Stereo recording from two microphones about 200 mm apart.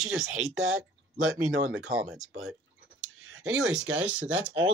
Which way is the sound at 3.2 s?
90° right.